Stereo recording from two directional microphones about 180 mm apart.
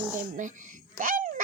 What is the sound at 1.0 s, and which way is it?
Frog, 50° right (ahead or behind).